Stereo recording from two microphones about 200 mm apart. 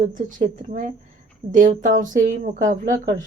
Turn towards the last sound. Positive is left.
turn(degrees=-40)  # may be behind; listen again after turning